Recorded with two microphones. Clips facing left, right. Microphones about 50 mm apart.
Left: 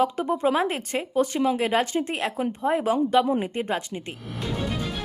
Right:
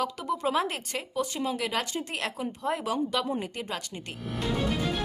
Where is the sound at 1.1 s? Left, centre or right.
Left.